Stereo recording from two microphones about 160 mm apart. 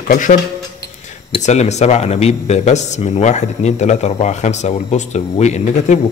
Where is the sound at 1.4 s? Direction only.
45° left (ahead or behind).